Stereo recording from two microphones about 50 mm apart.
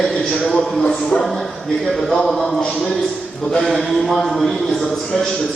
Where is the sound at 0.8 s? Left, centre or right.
Left.